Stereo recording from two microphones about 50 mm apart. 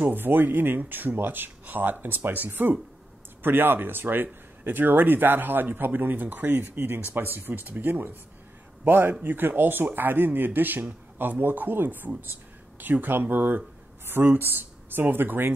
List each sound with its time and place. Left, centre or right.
0.1 s speech: right